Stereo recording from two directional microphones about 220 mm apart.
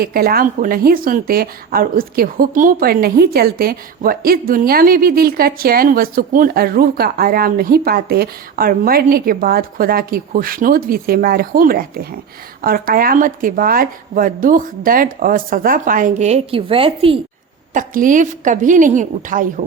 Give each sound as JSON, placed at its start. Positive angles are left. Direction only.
{"t": 0.0, "sound": "speech", "side_deg": -45}
{"t": 17.7, "sound": "speech", "side_deg": -35}